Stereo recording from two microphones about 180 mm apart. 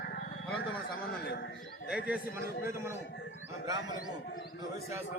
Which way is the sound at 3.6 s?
20° right (ahead or behind).